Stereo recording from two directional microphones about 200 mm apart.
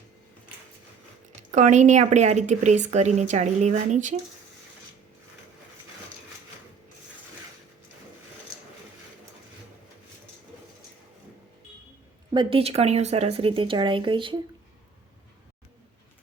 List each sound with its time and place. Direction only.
1.5 s speech: 40° right (ahead or behind)
12.3 s speech: 25° right (ahead or behind)